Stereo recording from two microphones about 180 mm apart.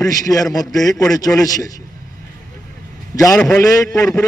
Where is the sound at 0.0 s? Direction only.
20° left (ahead or behind).